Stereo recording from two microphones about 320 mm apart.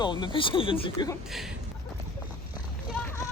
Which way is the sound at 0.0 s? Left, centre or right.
Centre.